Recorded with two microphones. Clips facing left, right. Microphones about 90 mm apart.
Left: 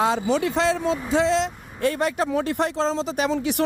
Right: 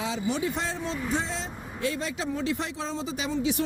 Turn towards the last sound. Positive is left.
turn(degrees=65)  # may be behind; listen again after turning